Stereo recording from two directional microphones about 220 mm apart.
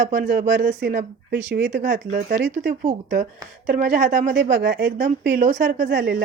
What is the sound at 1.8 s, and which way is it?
Speech, 35° right (ahead or behind).